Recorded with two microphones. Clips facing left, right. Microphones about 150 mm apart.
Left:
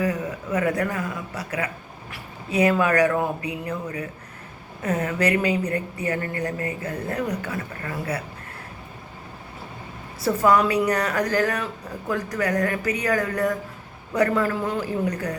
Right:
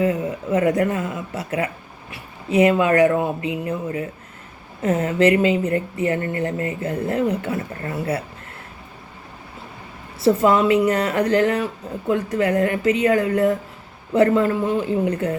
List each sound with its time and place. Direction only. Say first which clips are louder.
0.0 s speech: right 5 dB; 25° right (ahead or behind)
10.2 s speech: right 3 dB; 25° right (ahead or behind)